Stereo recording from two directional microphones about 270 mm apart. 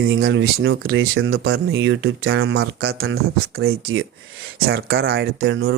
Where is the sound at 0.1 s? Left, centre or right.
Right.